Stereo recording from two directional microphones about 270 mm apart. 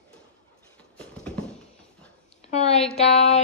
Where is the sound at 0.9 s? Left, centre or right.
Centre.